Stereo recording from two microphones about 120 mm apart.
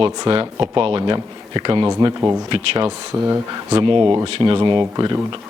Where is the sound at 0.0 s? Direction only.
45° right (ahead or behind).